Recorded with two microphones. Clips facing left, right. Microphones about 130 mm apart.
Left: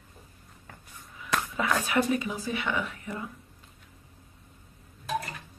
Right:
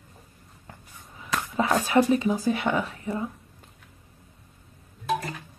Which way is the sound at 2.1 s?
35° right (ahead or behind).